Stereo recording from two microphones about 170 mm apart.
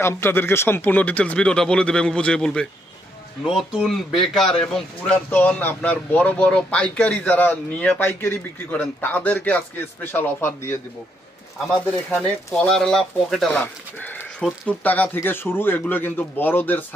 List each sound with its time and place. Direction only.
0.0 s speech: 15° left (ahead or behind)